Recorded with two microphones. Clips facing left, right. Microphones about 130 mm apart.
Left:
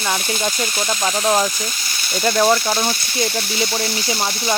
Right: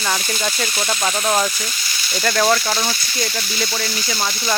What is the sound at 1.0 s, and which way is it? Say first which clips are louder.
Speech: left 2 dB; 5° left (ahead or behind).